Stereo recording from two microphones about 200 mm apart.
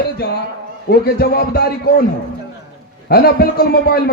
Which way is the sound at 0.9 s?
50° left (ahead or behind).